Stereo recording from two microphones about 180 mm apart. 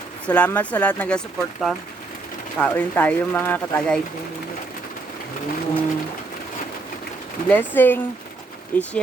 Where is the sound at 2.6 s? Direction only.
10° left (ahead or behind).